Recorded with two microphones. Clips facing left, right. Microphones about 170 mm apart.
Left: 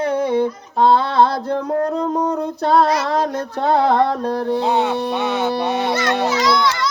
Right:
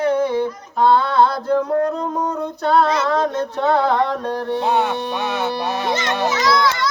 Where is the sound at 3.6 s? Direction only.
25° left (ahead or behind).